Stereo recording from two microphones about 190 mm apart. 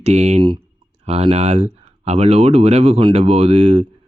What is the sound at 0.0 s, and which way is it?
Speech, 35° right (ahead or behind).